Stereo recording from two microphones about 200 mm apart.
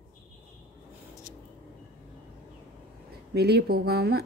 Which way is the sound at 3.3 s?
55° right (ahead or behind).